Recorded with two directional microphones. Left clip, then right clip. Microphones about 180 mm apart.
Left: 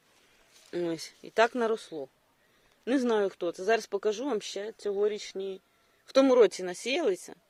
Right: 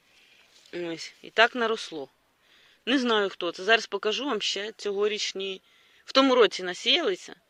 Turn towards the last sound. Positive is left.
turn(degrees=5)  # may be behind; listen again after turning